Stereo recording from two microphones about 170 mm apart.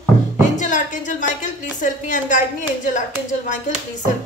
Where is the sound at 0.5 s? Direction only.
45° left (ahead or behind).